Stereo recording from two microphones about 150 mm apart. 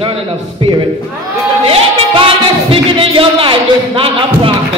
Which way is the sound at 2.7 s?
35° right (ahead or behind).